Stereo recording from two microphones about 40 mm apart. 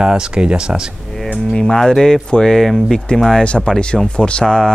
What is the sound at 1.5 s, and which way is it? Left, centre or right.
Speech, centre.